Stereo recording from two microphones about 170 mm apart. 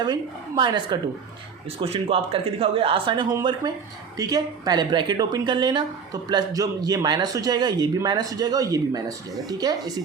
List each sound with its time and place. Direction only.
0.0 s speech: 25° right (ahead or behind)